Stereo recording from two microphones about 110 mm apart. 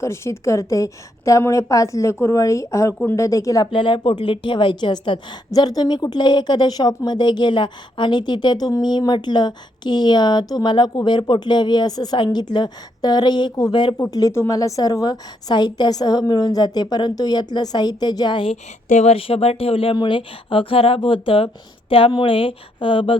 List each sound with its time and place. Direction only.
0.0 s a woman's voice: 25° left (ahead or behind)
3.7 s a woman's voice: 45° left (ahead or behind)
14.1 s a woman's voice: 30° left (ahead or behind); by 18.5 s 45° left (ahead or behind)
18.9 s speech: 70° left (ahead or behind); by 23.1 s 50° left (ahead or behind)